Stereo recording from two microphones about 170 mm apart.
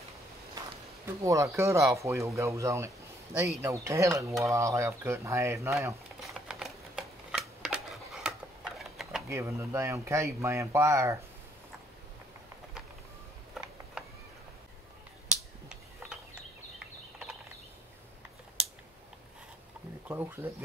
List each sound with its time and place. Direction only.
1.0 s speech: 20° right (ahead or behind)
6.2 s typewriter: centre (ahead or behind)
9.3 s speech: 15° right (ahead or behind)
15.3 s finger snapping: 5° right (ahead or behind)
18.6 s a sound: 5° right (ahead or behind)
20.1 s speech: 15° right (ahead or behind)